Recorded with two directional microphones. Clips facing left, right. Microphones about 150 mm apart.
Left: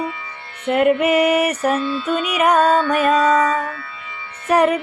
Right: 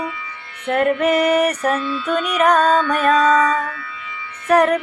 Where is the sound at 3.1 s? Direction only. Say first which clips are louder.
Even; 30° left (ahead or behind).